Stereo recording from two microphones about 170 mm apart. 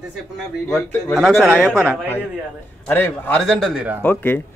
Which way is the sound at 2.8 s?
10° left (ahead or behind).